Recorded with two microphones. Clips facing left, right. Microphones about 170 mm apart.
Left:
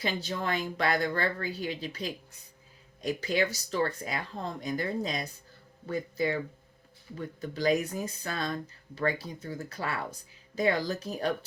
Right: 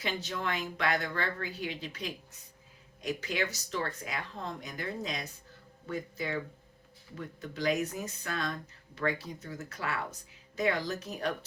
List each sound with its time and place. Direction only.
0.0 s speech: 35° left (ahead or behind)
7.5 s speech: 35° left (ahead or behind)